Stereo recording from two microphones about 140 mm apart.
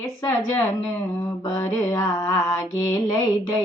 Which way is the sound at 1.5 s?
25° left (ahead or behind).